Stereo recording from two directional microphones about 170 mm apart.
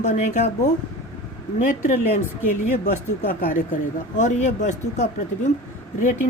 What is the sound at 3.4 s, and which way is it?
A woman's voice, 55° left (ahead or behind).